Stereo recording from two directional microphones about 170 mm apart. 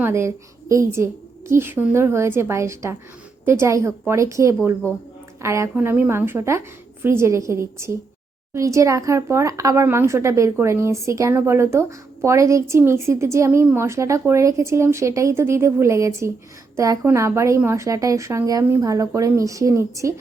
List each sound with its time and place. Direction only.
0.0 s a woman's voice: 15° right (ahead or behind)